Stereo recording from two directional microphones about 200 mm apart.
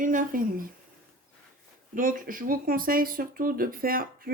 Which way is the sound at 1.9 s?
45° right (ahead or behind).